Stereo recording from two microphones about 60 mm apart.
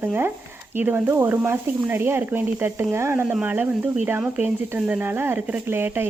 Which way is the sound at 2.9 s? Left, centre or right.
Right.